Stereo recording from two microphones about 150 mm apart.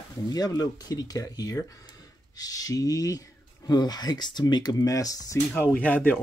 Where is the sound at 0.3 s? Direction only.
25° left (ahead or behind).